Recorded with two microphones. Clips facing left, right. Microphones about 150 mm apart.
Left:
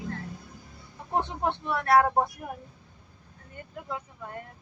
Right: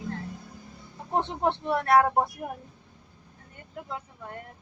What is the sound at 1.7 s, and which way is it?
Speech, 25° right (ahead or behind).